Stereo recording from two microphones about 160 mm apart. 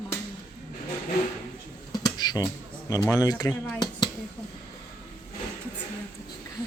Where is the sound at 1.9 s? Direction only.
25° left (ahead or behind).